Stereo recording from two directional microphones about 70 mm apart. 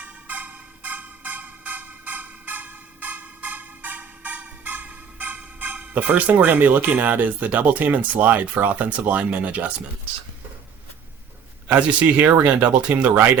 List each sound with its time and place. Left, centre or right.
0.0 s music: right
11.7 s speech: centre